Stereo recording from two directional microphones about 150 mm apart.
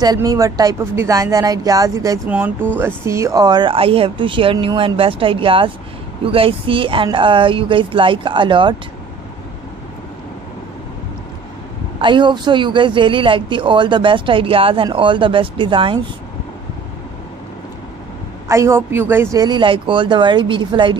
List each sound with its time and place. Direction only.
0.0 s speech: 25° right (ahead or behind)
2.2 s a woman's voice: 10° right (ahead or behind); by 8.7 s 35° right (ahead or behind)
12.0 s speech: 30° right (ahead or behind)
18.5 s a woman's voice: 20° right (ahead or behind)
19.3 s speech: 30° right (ahead or behind)